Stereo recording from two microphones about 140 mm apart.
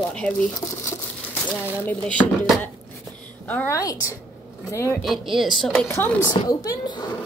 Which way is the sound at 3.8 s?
25° left (ahead or behind).